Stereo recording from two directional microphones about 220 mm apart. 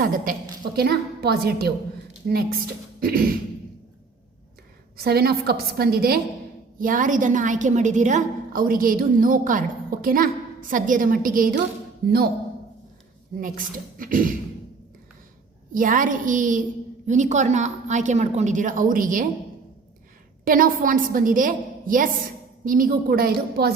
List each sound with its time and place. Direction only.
0.0 s a woman's voice: 40° right (ahead or behind)
3.0 s a woman's voice: 40° right (ahead or behind)
5.0 s a woman's voice: 45° right (ahead or behind)
13.3 s a woman's voice: 40° right (ahead or behind)
15.7 s a woman's voice: 35° right (ahead or behind)
20.4 s a woman's voice: 40° right (ahead or behind)